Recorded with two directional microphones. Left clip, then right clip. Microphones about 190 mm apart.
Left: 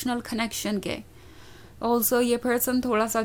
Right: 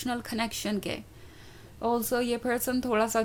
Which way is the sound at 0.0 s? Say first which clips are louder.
Left 3 dB; 15° left (ahead or behind).